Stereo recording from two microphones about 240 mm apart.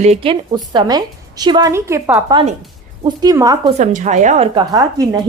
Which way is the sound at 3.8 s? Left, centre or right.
Right.